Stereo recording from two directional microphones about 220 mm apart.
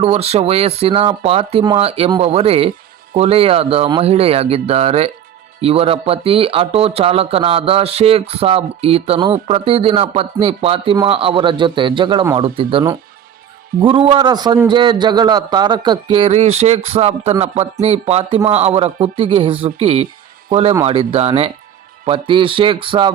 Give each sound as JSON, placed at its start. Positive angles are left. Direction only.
{"t": 0.0, "sound": "speech", "side_deg": -30}